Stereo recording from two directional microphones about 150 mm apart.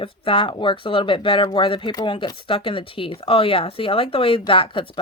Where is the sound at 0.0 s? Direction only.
35° left (ahead or behind).